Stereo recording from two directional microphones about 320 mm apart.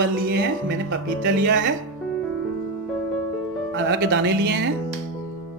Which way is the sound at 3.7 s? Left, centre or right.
Right.